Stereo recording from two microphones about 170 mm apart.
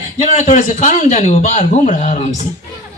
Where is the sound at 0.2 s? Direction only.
45° left (ahead or behind).